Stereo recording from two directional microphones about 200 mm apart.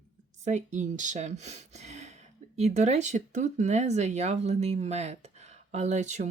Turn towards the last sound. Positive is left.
turn(degrees=-35)  # may be behind; listen again after turning